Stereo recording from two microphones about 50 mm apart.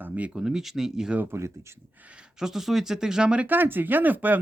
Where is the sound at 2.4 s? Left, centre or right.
Centre.